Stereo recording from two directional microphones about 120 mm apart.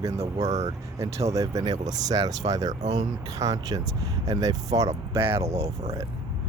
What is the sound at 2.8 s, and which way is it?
Speech, 70° right (ahead or behind).